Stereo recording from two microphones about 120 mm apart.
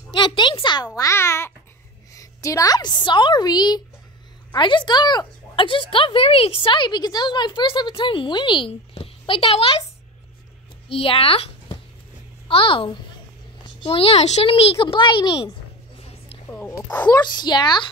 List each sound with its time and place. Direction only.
0.1 s a woman's voice: 40° left (ahead or behind)
0.9 s a child's voice: 25° left (ahead or behind); by 9.8 s 50° left (ahead or behind)
10.9 s a child's voice: 55° left (ahead or behind)
14.5 s a woman's voice: 50° left (ahead or behind)
16.4 s speech: 15° left (ahead or behind)
17.4 s a woman's voice: 40° left (ahead or behind)